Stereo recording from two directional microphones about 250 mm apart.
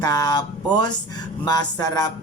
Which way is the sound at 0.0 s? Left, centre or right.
Centre.